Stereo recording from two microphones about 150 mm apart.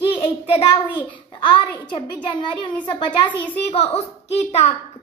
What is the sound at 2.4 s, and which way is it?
Speech, 30° left (ahead or behind).